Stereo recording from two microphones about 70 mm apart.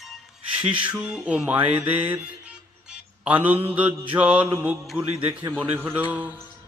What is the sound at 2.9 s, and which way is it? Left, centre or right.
Mantra, right.